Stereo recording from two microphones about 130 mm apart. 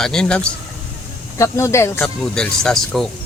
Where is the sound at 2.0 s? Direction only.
5° left (ahead or behind).